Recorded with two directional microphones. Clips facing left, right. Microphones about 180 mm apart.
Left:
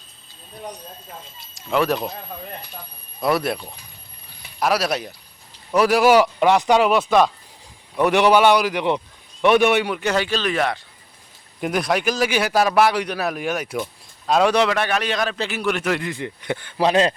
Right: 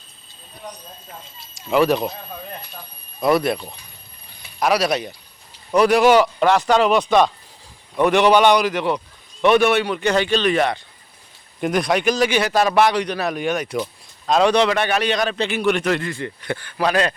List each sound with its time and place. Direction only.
1.5 s speech: centre (ahead or behind)
3.2 s speech: centre (ahead or behind)
16.0 s speech: 20° left (ahead or behind)